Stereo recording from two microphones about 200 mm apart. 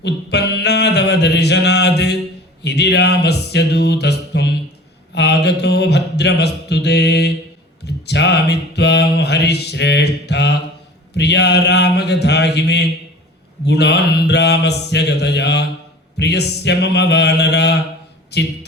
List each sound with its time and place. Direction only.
0.0 s mantra: 60° left (ahead or behind)
2.6 s a sound: 55° left (ahead or behind)
5.1 s mantra: 55° left (ahead or behind)
11.1 s a sound: 60° left (ahead or behind)
13.7 s mantra: 60° left (ahead or behind)
18.3 s speech: 55° left (ahead or behind)